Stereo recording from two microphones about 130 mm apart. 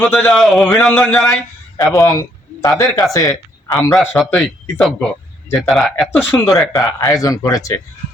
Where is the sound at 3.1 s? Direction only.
25° left (ahead or behind).